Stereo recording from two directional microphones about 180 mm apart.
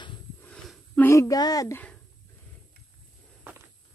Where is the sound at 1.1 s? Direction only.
20° left (ahead or behind).